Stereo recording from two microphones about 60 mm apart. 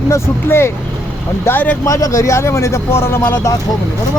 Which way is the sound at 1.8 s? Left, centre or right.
Left.